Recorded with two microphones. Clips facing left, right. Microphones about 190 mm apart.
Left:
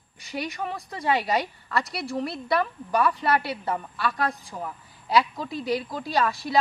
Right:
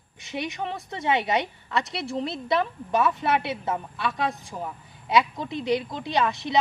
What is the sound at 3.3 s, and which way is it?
Speech, 20° right (ahead or behind).